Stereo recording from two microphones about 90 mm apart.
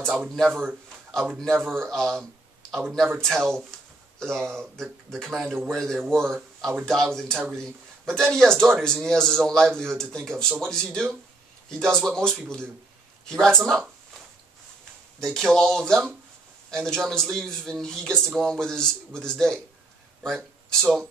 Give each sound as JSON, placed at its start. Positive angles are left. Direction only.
{"t": 0.4, "sound": "a man's voice", "side_deg": 5}
{"t": 15.1, "sound": "a man's voice", "side_deg": 5}